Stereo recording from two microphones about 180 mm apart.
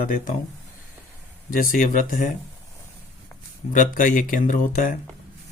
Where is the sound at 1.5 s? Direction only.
50° left (ahead or behind).